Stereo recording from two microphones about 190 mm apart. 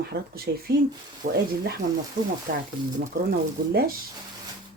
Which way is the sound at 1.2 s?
40° right (ahead or behind).